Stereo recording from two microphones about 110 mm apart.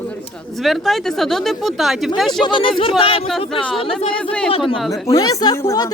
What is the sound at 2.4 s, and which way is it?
Speech, 50° left (ahead or behind).